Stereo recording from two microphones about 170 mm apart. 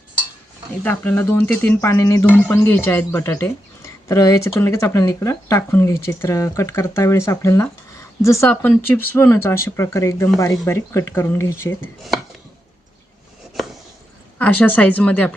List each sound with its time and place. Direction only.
0.9 s speech: 10° left (ahead or behind)
14.3 s speech: 10° left (ahead or behind)